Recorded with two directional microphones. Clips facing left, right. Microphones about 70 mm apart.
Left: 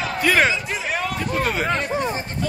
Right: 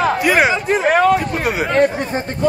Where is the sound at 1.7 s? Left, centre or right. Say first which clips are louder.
Right 7 dB; right.